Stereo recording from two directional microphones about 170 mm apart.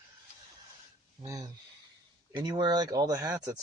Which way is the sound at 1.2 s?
20° right (ahead or behind).